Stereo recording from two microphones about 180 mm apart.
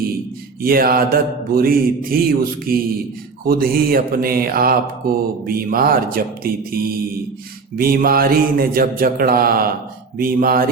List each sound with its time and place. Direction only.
0.6 s mantra: 55° right (ahead or behind)
10.2 s speech: 50° right (ahead or behind)